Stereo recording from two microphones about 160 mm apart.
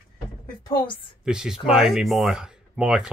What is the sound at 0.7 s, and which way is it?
Speech, 25° left (ahead or behind).